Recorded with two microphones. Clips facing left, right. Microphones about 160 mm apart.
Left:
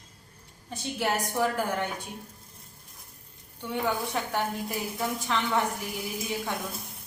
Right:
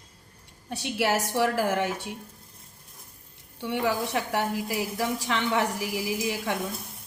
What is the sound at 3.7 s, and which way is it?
A woman's voice, 75° right (ahead or behind).